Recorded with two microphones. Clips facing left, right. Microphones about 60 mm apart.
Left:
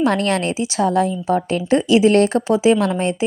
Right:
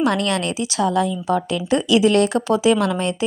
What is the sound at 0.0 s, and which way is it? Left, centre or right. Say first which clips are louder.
A woman's voice: left 2 dB; left.